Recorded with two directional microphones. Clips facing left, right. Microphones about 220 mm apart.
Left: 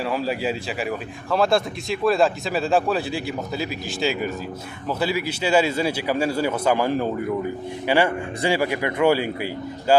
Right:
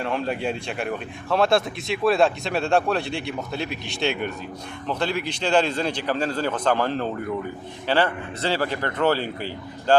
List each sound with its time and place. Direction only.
0.0 s a man's voice: 5° left (ahead or behind)